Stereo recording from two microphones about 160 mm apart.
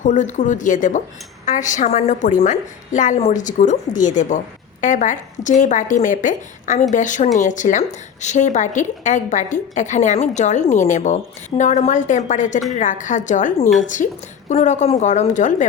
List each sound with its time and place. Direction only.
0.0 s a woman's voice: 50° left (ahead or behind)